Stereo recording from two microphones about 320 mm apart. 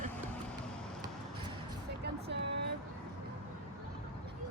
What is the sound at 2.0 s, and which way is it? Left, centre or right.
Vehicle, right.